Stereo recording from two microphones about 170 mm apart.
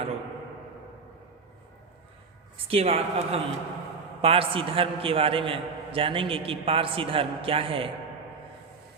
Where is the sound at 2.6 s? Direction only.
35° right (ahead or behind).